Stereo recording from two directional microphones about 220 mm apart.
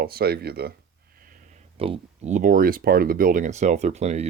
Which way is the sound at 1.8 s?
30° right (ahead or behind).